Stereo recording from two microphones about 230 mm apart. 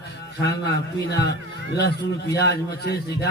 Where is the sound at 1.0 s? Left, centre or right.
Left.